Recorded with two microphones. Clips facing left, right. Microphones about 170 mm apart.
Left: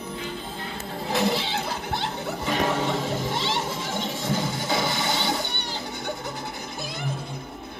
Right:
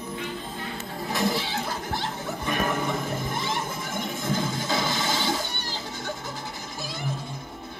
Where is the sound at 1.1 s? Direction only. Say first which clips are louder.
Left 2 dB; 65° left (ahead or behind).